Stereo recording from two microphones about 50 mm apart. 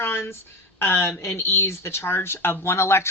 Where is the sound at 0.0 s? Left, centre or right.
Left.